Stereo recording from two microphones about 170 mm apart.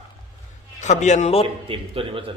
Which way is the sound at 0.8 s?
45° left (ahead or behind).